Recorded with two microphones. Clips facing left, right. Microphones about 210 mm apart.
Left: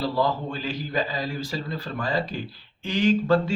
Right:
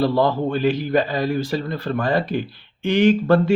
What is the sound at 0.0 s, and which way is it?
Speech, 65° right (ahead or behind).